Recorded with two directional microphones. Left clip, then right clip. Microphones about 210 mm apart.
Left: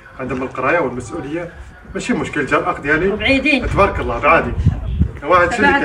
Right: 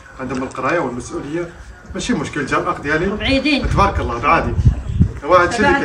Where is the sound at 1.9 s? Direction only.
10° right (ahead or behind).